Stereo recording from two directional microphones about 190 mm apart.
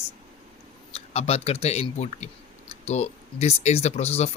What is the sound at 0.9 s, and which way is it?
Speech, 30° left (ahead or behind).